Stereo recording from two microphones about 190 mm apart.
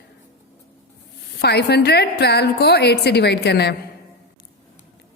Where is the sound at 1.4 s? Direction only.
60° left (ahead or behind).